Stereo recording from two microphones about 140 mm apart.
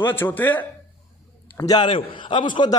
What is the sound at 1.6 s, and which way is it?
A man's voice, 30° left (ahead or behind).